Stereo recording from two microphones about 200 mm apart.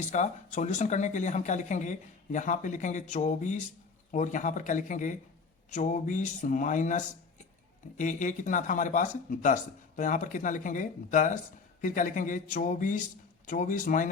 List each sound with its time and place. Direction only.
0.1 s speech: 35° left (ahead or behind)